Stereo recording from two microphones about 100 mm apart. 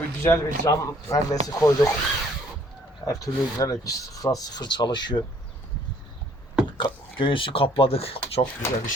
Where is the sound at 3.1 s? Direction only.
35° left (ahead or behind).